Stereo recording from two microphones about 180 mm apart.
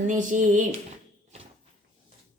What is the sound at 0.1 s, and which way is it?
Speech, 45° right (ahead or behind).